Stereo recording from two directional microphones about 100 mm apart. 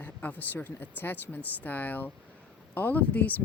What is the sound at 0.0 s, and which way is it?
Speech, 15° left (ahead or behind).